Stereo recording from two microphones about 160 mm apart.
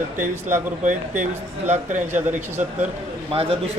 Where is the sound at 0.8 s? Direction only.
50° right (ahead or behind).